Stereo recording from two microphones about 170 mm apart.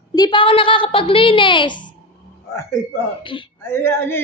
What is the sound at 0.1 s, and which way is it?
Speech, 25° left (ahead or behind).